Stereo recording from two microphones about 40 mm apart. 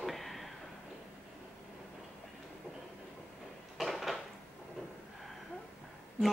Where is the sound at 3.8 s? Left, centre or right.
Centre.